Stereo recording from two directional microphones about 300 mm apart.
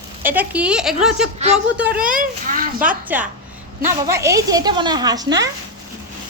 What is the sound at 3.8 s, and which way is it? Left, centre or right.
A woman's voice, centre.